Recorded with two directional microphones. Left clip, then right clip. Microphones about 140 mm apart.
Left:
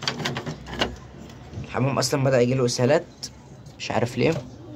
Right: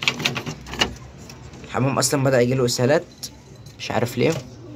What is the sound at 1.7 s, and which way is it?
Speech, centre (ahead or behind).